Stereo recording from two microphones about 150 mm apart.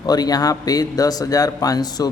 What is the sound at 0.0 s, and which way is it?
A man's voice, 25° left (ahead or behind).